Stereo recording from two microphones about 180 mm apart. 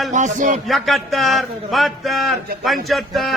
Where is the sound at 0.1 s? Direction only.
45° right (ahead or behind).